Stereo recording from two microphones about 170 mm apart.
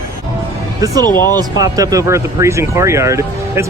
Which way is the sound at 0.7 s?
20° right (ahead or behind).